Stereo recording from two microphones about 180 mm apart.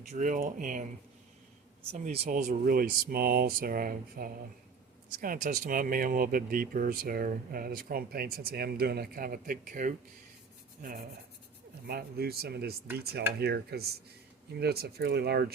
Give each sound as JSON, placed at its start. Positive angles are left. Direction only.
{"t": 0.1, "sound": "speech", "side_deg": -45}
{"t": 1.9, "sound": "speech", "side_deg": -35}
{"t": 2.3, "sound": "speech", "side_deg": -50}
{"t": 11.9, "sound": "speech", "side_deg": -60}